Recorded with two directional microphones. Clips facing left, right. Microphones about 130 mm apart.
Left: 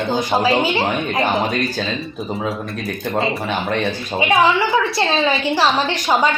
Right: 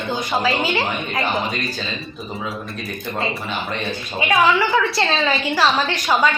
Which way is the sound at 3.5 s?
60° left (ahead or behind).